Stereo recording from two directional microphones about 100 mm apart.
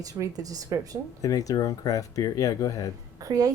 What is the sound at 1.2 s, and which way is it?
Speech, 35° left (ahead or behind).